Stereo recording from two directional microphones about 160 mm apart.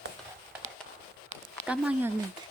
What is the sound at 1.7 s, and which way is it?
Speech, 10° right (ahead or behind).